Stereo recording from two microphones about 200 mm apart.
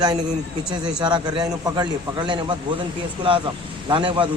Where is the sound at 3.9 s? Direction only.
25° right (ahead or behind).